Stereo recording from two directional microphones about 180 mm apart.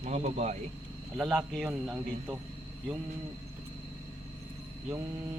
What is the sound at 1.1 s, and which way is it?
A man's voice, centre (ahead or behind).